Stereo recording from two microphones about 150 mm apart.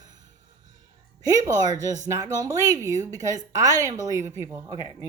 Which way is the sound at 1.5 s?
25° right (ahead or behind).